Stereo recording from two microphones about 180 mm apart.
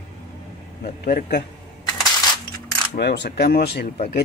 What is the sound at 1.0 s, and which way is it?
Speech, 55° left (ahead or behind).